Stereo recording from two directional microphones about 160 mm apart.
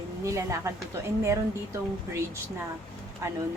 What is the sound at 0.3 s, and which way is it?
A woman's voice, 20° right (ahead or behind).